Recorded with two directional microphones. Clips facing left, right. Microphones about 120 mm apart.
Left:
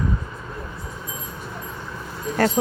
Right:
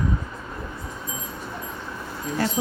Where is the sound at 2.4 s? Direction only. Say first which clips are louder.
Left 6 dB; 50° left (ahead or behind).